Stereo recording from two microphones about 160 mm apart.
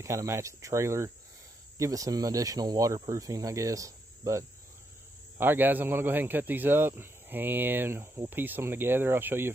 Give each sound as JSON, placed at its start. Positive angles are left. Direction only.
{"t": 0.0, "sound": "speech", "side_deg": -20}